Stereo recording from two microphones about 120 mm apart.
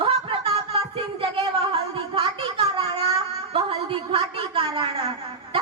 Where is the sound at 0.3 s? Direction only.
55° right (ahead or behind).